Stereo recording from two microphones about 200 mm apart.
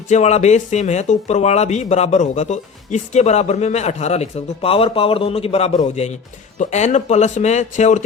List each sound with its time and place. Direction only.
0.1 s speech: 35° left (ahead or behind)